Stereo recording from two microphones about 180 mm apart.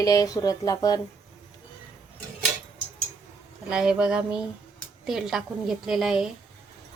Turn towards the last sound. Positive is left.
turn(degrees=0)  # may be behind; listen again after turning